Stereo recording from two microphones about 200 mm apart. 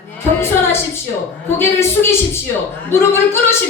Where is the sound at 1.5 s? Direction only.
10° left (ahead or behind).